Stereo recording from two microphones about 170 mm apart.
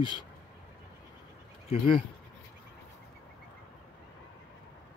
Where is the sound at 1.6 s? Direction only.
30° left (ahead or behind).